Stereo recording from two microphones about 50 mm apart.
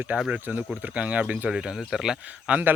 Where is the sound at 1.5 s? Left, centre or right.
Centre.